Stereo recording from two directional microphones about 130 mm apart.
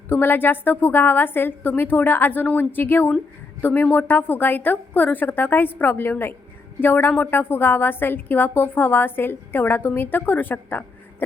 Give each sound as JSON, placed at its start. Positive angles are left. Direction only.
{"t": 0.1, "sound": "a woman's voice", "side_deg": 15}